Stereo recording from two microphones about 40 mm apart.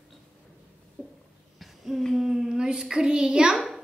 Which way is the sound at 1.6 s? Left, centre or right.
Centre.